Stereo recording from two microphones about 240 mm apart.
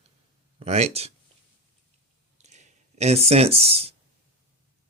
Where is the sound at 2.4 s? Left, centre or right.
Right.